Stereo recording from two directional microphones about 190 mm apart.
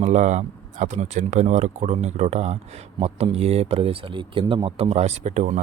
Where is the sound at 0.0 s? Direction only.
40° right (ahead or behind).